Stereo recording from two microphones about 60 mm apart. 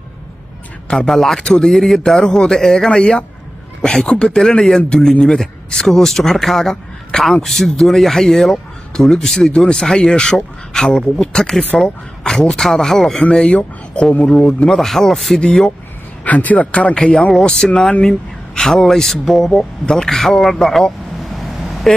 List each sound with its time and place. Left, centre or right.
0.9 s speech: centre
13.2 s speech: centre
14.7 s speech: centre
16.3 s a man's voice: left
17.0 s speech: centre